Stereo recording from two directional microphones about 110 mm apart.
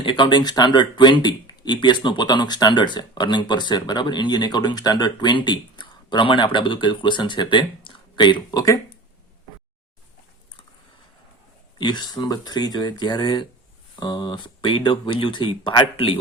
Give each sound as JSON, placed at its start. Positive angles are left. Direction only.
{"t": 0.0, "sound": "speech", "side_deg": 50}
{"t": 11.8, "sound": "speech", "side_deg": 45}